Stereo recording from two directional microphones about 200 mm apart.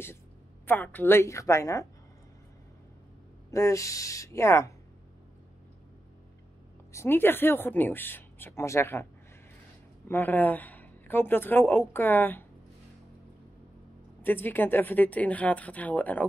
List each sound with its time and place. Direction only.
0.7 s speech: 10° left (ahead or behind)
3.5 s speech: 15° left (ahead or behind)
6.9 s speech: 10° left (ahead or behind)
10.0 s speech: 10° left (ahead or behind)
14.2 s speech: 10° left (ahead or behind)